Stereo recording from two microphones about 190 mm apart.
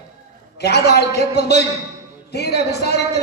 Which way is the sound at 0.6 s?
60° left (ahead or behind).